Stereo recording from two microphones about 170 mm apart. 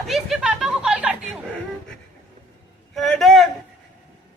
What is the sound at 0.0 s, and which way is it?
Chatter, centre (ahead or behind).